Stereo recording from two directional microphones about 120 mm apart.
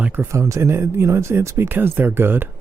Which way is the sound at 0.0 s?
20° right (ahead or behind).